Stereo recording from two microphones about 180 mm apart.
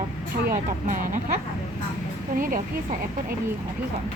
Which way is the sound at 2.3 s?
50° right (ahead or behind).